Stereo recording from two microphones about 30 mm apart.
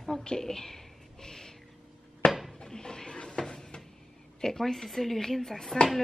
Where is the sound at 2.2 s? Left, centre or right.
Left.